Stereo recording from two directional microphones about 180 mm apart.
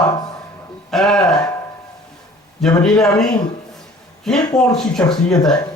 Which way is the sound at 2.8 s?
5° left (ahead or behind).